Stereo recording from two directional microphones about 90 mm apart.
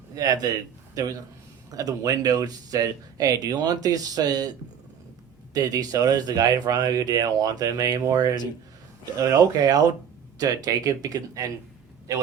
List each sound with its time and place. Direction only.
0.1 s speech: 45° right (ahead or behind)
5.5 s speech: 45° right (ahead or behind)
9.5 s speech: 45° right (ahead or behind)